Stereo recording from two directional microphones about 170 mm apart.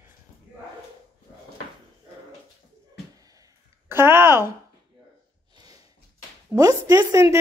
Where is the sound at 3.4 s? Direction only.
15° right (ahead or behind).